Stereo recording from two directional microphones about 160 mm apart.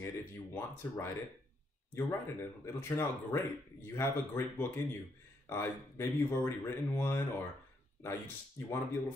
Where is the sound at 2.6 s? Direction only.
15° left (ahead or behind).